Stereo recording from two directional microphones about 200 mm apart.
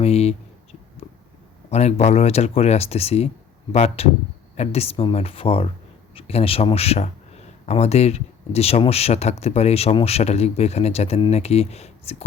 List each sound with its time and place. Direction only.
0.0 s speech: 30° left (ahead or behind)
1.7 s speech: 35° left (ahead or behind)